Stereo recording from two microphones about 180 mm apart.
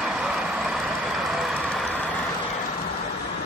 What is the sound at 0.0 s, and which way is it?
Vehicle, 5° right (ahead or behind).